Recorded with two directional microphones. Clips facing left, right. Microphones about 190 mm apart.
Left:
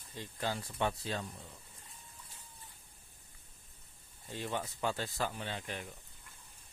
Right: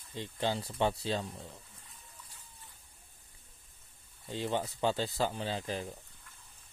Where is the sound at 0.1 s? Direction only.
25° right (ahead or behind).